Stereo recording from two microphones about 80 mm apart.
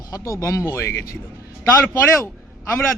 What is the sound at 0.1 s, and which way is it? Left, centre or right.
A man's voice, left.